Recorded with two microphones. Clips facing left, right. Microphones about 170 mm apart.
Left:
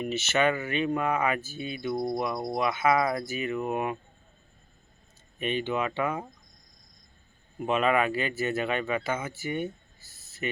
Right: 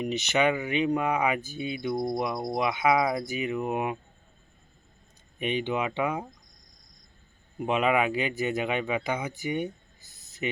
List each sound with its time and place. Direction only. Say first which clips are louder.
0.0 s speech: right 1 dB; 15° right (ahead or behind)
5.4 s speech: even; 15° right (ahead or behind)
7.6 s speech: even; 15° right (ahead or behind)